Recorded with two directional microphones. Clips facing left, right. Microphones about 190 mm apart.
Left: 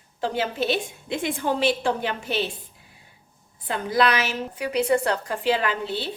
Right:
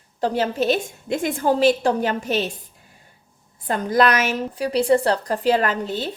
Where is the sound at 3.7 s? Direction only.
45° right (ahead or behind).